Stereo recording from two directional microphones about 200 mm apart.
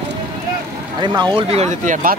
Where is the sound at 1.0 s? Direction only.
25° right (ahead or behind); by 2.1 s 40° right (ahead or behind).